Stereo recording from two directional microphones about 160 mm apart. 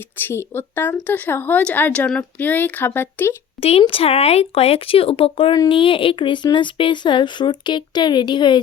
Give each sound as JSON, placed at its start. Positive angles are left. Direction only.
{"t": 0.2, "sound": "speech", "side_deg": 15}
{"t": 3.6, "sound": "speech", "side_deg": 35}